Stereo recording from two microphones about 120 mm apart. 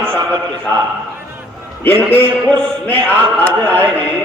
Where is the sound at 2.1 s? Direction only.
15° left (ahead or behind).